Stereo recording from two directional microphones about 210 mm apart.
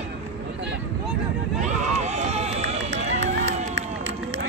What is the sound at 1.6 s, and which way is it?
Run, 35° right (ahead or behind).